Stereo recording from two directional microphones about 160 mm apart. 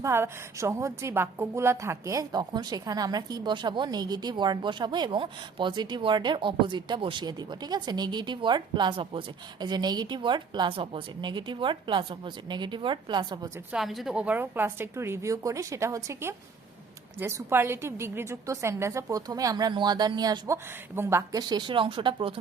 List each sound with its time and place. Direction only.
0.0 s a woman's voice: 15° right (ahead or behind)
13.7 s a woman's voice: centre (ahead or behind); by 22.4 s 35° right (ahead or behind)